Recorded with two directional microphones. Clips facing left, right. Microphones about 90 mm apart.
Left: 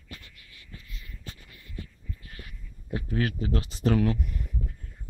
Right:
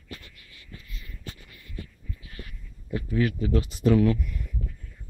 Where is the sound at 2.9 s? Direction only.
40° left (ahead or behind).